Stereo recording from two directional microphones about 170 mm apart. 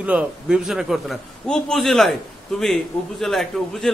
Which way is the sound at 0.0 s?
5° right (ahead or behind).